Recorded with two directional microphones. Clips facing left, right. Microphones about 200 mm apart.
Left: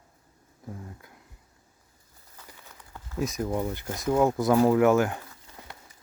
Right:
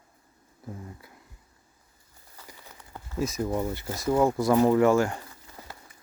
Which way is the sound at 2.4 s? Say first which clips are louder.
Right 2 dB; 10° right (ahead or behind).